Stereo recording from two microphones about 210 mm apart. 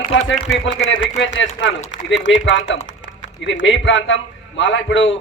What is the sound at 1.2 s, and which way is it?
A man's voice, 60° left (ahead or behind).